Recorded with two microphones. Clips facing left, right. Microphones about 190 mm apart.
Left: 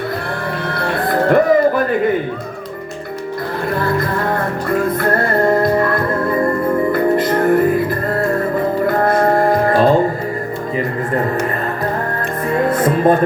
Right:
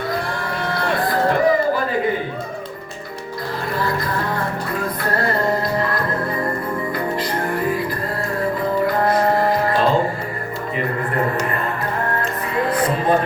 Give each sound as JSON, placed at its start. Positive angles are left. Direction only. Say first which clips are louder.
{"t": 0.7, "sound": "music", "louder": "left 2 dB", "side_deg": 60}
{"t": 5.6, "sound": "music", "louder": "left 6 dB", "side_deg": 55}
{"t": 9.0, "sound": "music", "louder": "left 5 dB", "side_deg": 50}
{"t": 12.7, "sound": "music", "louder": "left 5 dB", "side_deg": 45}